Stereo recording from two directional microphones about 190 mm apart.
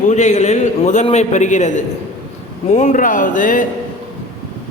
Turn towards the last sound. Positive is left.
turn(degrees=45)  # may be behind; listen again after turning